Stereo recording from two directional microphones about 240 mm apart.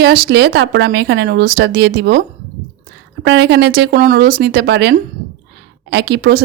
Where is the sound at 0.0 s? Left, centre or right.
Right.